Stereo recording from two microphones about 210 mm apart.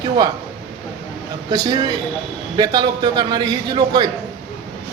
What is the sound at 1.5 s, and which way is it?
A man's voice, 20° right (ahead or behind).